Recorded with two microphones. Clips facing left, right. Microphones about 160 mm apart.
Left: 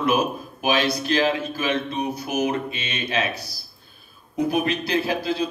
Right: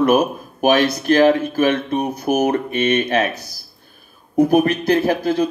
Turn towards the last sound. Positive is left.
turn(degrees=-50)  # may be behind; listen again after turning